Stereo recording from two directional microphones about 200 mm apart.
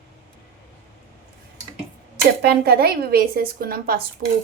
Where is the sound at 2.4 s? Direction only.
50° right (ahead or behind).